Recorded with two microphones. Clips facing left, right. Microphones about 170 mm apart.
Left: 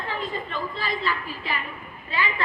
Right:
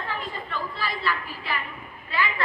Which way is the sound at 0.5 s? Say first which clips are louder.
Left 2 dB; 20° left (ahead or behind).